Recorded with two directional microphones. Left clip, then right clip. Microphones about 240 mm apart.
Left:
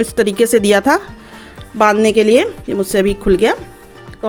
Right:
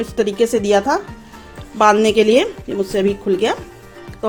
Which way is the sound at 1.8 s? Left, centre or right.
Centre.